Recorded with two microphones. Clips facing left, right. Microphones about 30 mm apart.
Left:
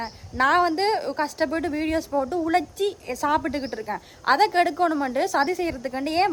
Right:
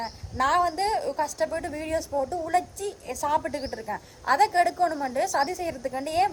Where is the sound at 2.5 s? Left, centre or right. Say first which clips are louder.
Left 4 dB; left.